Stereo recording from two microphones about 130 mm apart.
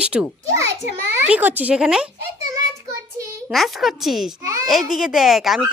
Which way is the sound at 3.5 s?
Centre (ahead or behind).